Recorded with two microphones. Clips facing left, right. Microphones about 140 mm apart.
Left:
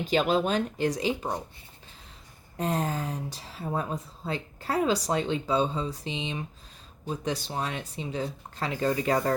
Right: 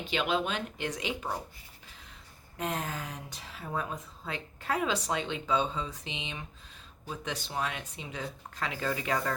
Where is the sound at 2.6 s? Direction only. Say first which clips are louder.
Left 6 dB; 35° left (ahead or behind).